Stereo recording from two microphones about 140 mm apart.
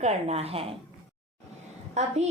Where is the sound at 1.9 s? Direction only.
55° right (ahead or behind).